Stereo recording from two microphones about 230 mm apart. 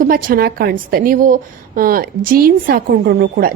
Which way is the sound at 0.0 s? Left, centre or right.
Right.